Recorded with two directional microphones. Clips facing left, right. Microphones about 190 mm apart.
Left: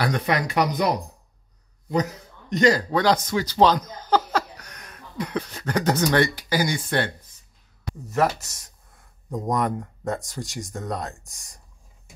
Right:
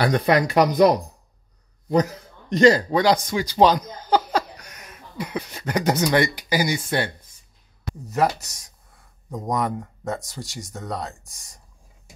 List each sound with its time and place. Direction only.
0.0 s speech: 35° right (ahead or behind)
2.5 s a man's voice: 30° right (ahead or behind)
2.9 s speech: 15° right (ahead or behind)
9.3 s speech: 5° right (ahead or behind)